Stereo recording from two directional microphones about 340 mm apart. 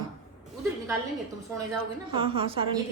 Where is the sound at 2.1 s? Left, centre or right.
Centre.